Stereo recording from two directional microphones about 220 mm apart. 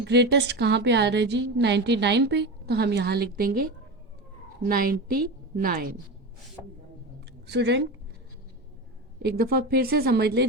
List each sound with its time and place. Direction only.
0.0 s a woman's voice: 50° right (ahead or behind)
7.4 s speech: 50° right (ahead or behind)
9.1 s a woman's voice: 45° right (ahead or behind)